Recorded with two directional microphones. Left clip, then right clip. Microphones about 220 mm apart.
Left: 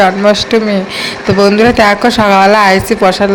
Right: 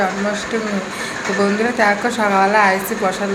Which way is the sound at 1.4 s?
40° left (ahead or behind).